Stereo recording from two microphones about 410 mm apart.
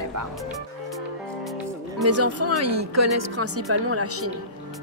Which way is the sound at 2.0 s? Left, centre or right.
Right.